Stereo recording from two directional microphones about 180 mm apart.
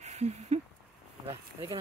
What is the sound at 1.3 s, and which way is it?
Speech, 20° right (ahead or behind).